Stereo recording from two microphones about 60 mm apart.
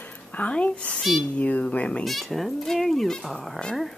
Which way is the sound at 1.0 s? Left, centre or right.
Centre.